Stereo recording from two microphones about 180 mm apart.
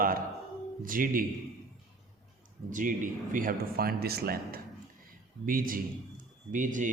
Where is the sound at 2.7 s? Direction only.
50° right (ahead or behind).